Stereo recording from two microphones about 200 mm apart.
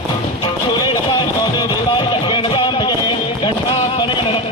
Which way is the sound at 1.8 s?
25° left (ahead or behind).